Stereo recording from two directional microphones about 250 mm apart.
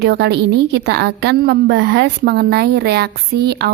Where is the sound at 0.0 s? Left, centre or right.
Right.